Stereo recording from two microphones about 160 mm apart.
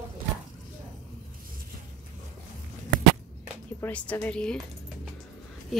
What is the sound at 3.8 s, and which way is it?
A woman's voice, 10° left (ahead or behind).